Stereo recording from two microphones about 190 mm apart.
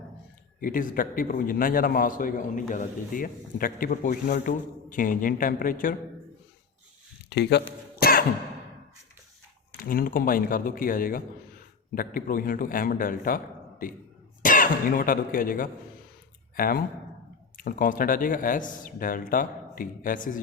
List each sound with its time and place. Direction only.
0.6 s speech: 45° left (ahead or behind)
7.3 s speech: 60° left (ahead or behind)
7.9 s throat clearing: 50° left (ahead or behind)
9.8 s speech: 50° left (ahead or behind)